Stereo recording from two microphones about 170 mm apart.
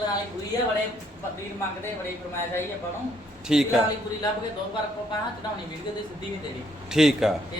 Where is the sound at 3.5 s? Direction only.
5° right (ahead or behind).